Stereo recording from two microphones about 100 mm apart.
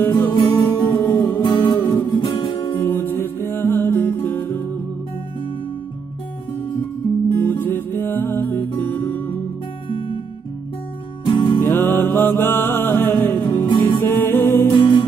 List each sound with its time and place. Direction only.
0.3 s music: 45° left (ahead or behind)
1.0 s music: 15° left (ahead or behind)
1.4 s music: 50° left (ahead or behind)
2.8 s music: 20° left (ahead or behind)
7.3 s music: 20° left (ahead or behind)
9.8 s music: 60° left (ahead or behind)
11.3 s music: 55° left (ahead or behind)
11.6 s music: 20° left (ahead or behind)
14.8 s music: 60° left (ahead or behind)